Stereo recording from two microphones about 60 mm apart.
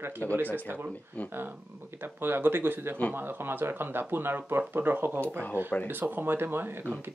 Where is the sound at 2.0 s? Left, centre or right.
Right.